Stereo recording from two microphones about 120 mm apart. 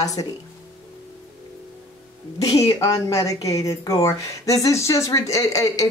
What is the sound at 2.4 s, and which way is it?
A woman's voice, 30° left (ahead or behind).